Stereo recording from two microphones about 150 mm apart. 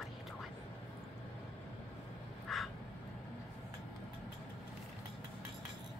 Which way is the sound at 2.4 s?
Centre (ahead or behind).